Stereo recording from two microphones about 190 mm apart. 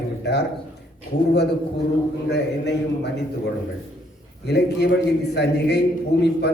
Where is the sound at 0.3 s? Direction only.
60° left (ahead or behind).